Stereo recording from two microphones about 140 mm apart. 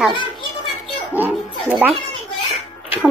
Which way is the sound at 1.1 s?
10° right (ahead or behind).